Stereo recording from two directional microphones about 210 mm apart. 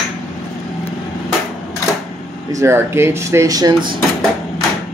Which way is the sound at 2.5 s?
15° right (ahead or behind).